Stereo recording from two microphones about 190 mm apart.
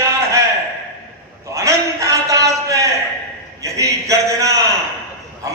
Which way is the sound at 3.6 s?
15° right (ahead or behind).